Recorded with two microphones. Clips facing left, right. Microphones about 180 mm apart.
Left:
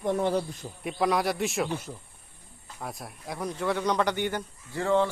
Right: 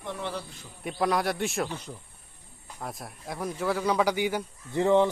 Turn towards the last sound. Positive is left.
turn(degrees=-20)  # may be behind; listen again after turning